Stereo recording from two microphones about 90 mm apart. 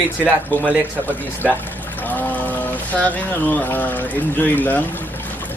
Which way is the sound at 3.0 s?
20° left (ahead or behind).